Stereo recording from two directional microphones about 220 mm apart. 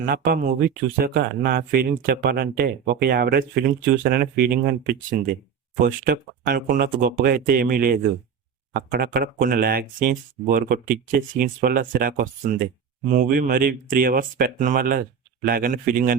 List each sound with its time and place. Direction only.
0.0 s speech: 45° right (ahead or behind)